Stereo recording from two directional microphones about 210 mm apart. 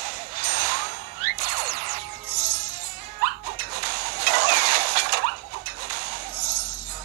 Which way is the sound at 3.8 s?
50° right (ahead or behind).